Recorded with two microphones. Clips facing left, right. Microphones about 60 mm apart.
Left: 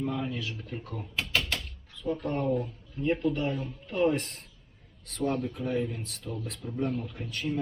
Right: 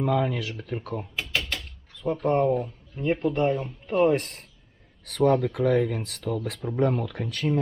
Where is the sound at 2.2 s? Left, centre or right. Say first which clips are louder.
Right 8 dB; right.